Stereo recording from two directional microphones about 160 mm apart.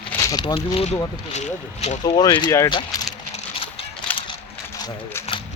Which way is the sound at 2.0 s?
25° left (ahead or behind).